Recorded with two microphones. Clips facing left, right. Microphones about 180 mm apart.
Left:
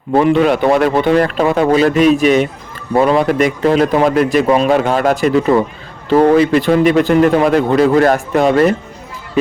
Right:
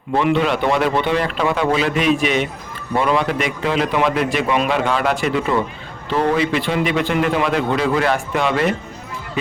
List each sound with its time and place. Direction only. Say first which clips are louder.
0.2 s a man's voice: left 6 dB; 45° left (ahead or behind)